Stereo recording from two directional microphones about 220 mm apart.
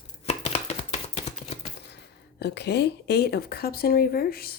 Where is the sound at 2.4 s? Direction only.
50° left (ahead or behind).